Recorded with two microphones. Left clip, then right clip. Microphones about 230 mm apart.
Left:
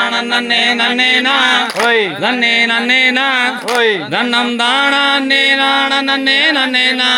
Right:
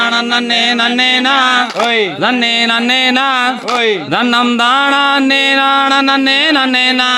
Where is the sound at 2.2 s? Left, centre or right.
Right.